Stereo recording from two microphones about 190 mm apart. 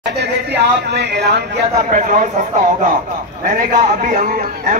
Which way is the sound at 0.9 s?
60° right (ahead or behind).